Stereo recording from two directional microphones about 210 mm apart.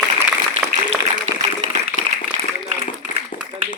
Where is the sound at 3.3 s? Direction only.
40° left (ahead or behind).